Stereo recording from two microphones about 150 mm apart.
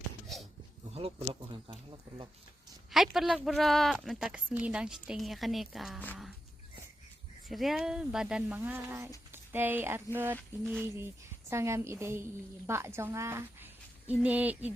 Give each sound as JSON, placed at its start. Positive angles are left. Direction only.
{"t": 0.9, "sound": "speech", "side_deg": -40}
{"t": 2.9, "sound": "a woman's voice", "side_deg": 0}
{"t": 7.4, "sound": "a woman's voice", "side_deg": 0}